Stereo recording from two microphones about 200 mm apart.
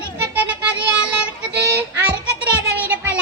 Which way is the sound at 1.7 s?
5° right (ahead or behind).